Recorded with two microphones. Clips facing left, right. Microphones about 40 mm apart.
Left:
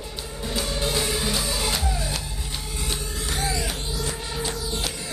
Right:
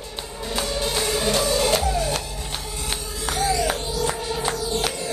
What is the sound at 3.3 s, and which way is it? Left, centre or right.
Music, right.